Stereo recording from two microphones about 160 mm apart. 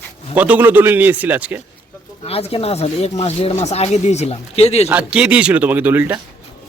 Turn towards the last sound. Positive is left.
turn(degrees=-10)  # may be behind; listen again after turning